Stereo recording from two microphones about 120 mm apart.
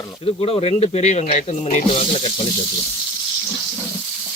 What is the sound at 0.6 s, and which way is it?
Speech, 60° left (ahead or behind).